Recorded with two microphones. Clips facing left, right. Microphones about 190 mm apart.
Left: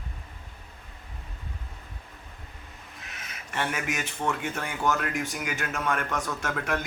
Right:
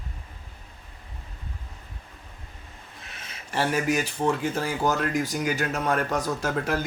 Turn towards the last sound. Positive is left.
turn(degrees=-30)  # may be behind; listen again after turning